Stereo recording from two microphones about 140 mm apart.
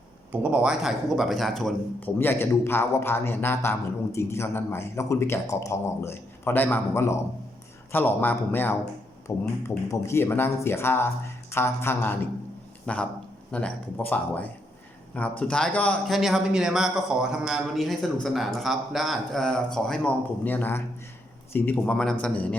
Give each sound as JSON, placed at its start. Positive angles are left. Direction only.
{"t": 0.3, "sound": "a man's voice", "side_deg": -10}
{"t": 2.0, "sound": "a man's voice", "side_deg": 15}